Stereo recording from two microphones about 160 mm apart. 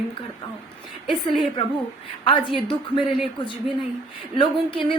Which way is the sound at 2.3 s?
30° left (ahead or behind).